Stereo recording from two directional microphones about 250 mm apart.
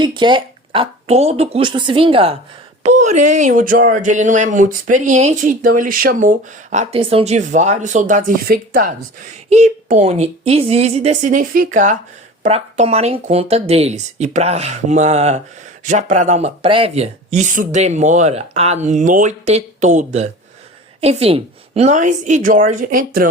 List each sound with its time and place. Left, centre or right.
0.0 s speech: centre